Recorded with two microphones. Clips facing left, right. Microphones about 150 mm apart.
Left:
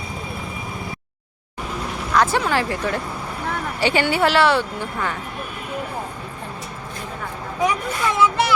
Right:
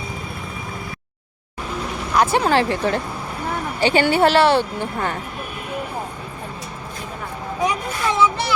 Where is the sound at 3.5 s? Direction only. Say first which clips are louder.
Right 3 dB; 25° right (ahead or behind).